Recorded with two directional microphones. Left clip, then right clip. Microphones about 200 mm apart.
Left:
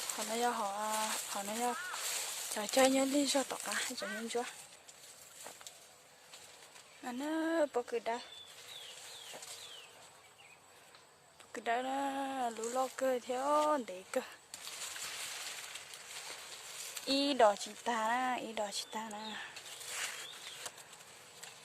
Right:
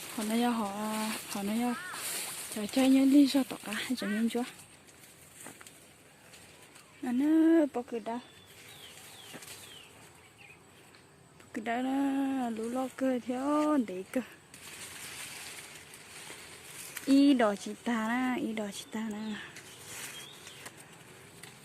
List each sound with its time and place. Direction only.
0.3 s a woman's voice: 5° right (ahead or behind)
2.6 s a woman's voice: 15° left (ahead or behind); by 4.5 s centre (ahead or behind)
7.0 s a woman's voice: 5° left (ahead or behind)
7.9 s speech: 15° left (ahead or behind)
11.5 s a woman's voice: 5° left (ahead or behind)
17.2 s a woman's voice: centre (ahead or behind)